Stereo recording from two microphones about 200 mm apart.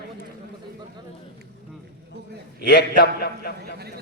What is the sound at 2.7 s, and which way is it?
A man's voice, 55° left (ahead or behind).